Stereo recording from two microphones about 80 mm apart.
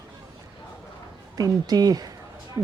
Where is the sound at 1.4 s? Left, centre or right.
Right.